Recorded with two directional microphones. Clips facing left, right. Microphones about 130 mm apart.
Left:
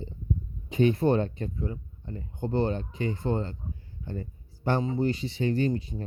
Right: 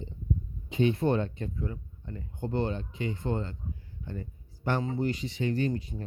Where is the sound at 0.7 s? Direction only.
45° left (ahead or behind).